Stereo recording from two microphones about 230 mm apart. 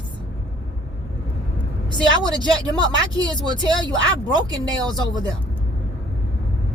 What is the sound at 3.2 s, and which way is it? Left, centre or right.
A woman's voice, centre.